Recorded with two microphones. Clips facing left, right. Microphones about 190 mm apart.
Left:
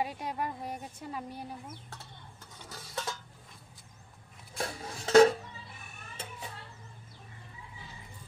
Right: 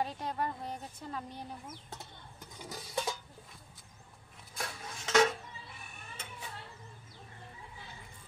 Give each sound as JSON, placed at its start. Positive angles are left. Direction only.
{"t": 0.0, "sound": "a woman's voice", "side_deg": 10}
{"t": 2.6, "sound": "a sound", "side_deg": -15}
{"t": 4.6, "sound": "dishes", "side_deg": 35}